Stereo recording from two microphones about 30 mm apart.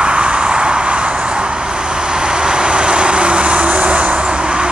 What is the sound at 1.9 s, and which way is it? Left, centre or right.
Vehicle, right.